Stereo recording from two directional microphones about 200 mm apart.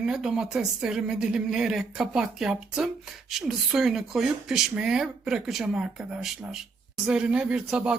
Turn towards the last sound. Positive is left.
turn(degrees=-5)  # may be behind; listen again after turning